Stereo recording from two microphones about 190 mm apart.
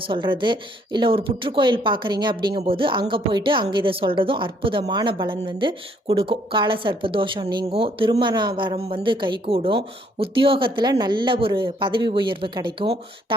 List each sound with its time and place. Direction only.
0.1 s a woman's voice: 25° right (ahead or behind)